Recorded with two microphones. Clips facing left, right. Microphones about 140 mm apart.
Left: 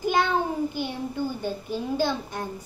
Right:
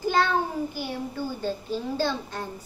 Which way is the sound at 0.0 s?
15° left (ahead or behind).